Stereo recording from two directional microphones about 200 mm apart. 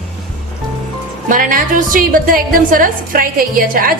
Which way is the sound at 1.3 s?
40° right (ahead or behind).